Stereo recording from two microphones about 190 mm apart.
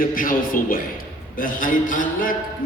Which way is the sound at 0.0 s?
45° left (ahead or behind).